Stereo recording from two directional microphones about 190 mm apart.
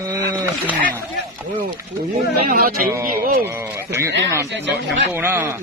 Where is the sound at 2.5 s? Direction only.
50° right (ahead or behind).